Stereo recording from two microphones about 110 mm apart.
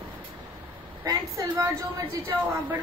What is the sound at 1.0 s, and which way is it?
Speech, 35° right (ahead or behind).